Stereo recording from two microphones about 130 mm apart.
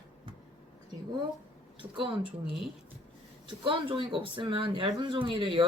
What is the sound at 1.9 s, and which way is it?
Speech, 40° right (ahead or behind).